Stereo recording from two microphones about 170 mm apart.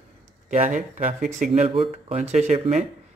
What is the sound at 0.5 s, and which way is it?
A man's voice, 50° right (ahead or behind).